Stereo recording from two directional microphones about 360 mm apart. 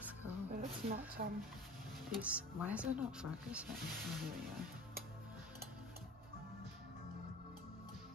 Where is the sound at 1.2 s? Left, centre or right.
Right.